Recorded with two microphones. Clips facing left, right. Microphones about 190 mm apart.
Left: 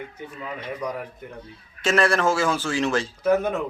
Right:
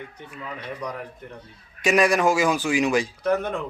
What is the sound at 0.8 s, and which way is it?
Speech, 5° left (ahead or behind).